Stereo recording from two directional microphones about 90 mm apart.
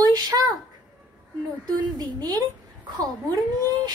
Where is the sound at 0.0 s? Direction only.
45° right (ahead or behind).